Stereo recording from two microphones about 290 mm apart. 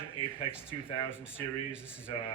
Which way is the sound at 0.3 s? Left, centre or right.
Centre.